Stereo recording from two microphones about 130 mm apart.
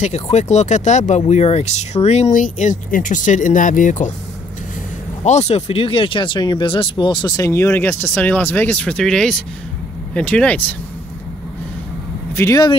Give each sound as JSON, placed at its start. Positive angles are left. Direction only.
{"t": 0.0, "sound": "speech", "side_deg": 60}
{"t": 2.3, "sound": "speech", "side_deg": 80}
{"t": 5.2, "sound": "speech", "side_deg": 60}
{"t": 12.4, "sound": "speech", "side_deg": 25}